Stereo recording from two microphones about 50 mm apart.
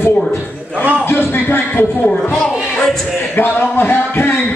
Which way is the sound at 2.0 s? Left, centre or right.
Centre.